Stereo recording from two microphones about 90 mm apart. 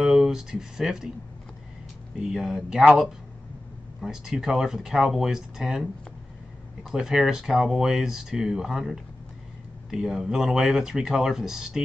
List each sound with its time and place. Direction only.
0.0 s speech: 5° right (ahead or behind)
2.1 s speech: 5° right (ahead or behind)
4.0 s speech: 5° right (ahead or behind)